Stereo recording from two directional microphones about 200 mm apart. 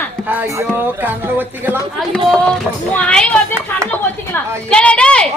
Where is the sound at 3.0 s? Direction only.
5° left (ahead or behind).